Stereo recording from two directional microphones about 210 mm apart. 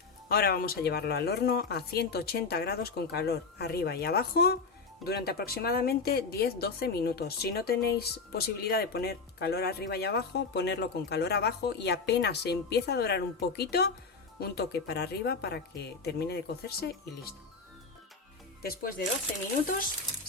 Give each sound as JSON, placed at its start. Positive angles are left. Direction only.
{"t": 0.3, "sound": "speech", "side_deg": 45}
{"t": 18.6, "sound": "speech", "side_deg": 45}